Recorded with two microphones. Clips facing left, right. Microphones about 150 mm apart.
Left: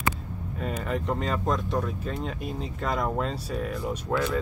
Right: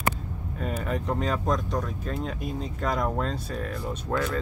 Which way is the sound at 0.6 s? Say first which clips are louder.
Even; centre (ahead or behind).